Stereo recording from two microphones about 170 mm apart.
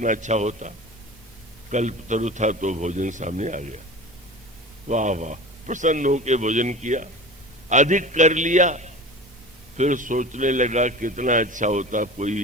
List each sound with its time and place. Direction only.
0.0 s a man's voice: 45° right (ahead or behind)
1.7 s a man's voice: 45° right (ahead or behind)
4.9 s a man's voice: 45° right (ahead or behind)